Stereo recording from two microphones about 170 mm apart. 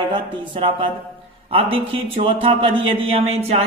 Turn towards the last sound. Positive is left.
turn(degrees=-35)  # may be behind; listen again after turning